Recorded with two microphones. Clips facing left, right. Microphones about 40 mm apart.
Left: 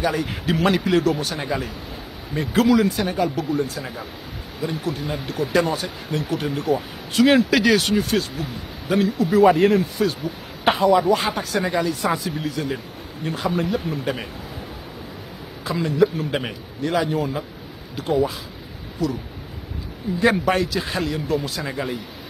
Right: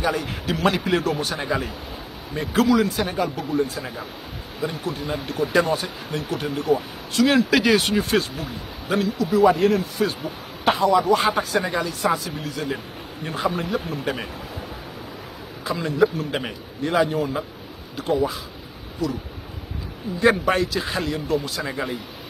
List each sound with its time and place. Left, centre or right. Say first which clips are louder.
0.0 s speech: left 1 dB; centre
7.1 s speech: left 2 dB; centre
9.2 s speech: left 2 dB; left
10.0 s speech: left 1 dB; centre
10.7 s speech: left 1 dB; centre
15.6 s speech: left 1 dB; centre